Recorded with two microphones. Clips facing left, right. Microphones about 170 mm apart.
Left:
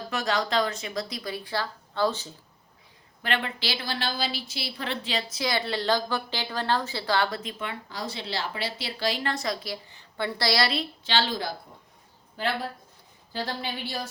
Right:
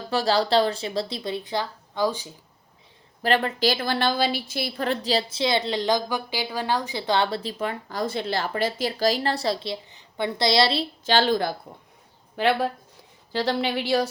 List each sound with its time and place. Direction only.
0.1 s speech: 30° right (ahead or behind); by 2.3 s 15° right (ahead or behind)
3.2 s a woman's voice: 40° right (ahead or behind)
11.0 s a woman's voice: 50° right (ahead or behind)
12.4 s speech: 70° right (ahead or behind)
13.3 s speech: 85° right